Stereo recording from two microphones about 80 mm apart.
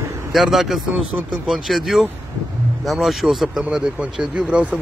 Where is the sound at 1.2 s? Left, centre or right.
Right.